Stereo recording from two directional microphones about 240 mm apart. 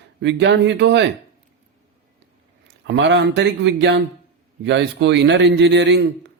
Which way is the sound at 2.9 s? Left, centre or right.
Right.